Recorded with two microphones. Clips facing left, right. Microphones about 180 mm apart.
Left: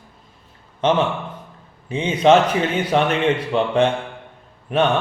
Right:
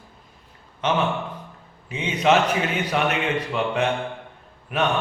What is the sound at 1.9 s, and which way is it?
A man's voice, 30° left (ahead or behind).